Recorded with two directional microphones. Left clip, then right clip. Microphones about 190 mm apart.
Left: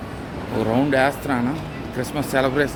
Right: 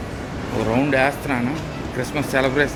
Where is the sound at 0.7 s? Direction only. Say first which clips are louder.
Even; 20° left (ahead or behind).